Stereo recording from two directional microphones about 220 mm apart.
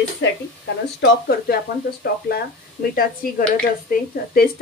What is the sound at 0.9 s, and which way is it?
A woman's voice, 45° left (ahead or behind).